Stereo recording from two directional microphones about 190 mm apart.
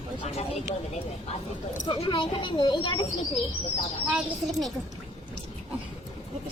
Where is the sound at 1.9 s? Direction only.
25° left (ahead or behind).